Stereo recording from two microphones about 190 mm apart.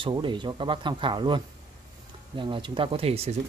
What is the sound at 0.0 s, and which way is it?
Speech, 25° right (ahead or behind).